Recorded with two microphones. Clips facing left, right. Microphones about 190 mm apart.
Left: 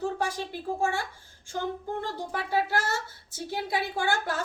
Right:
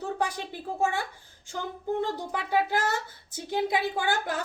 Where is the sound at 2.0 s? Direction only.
15° right (ahead or behind).